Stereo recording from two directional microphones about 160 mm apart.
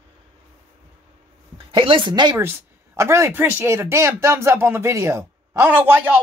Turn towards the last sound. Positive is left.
turn(degrees=-10)  # may be behind; listen again after turning